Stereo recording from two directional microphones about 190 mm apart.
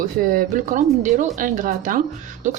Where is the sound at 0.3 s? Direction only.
45° right (ahead or behind).